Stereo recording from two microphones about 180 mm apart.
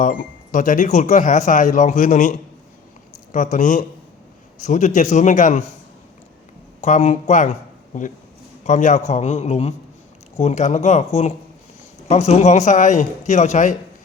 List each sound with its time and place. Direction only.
0.0 s speech: 45° left (ahead or behind)
6.8 s speech: 40° left (ahead or behind)
8.6 s speech: 45° left (ahead or behind)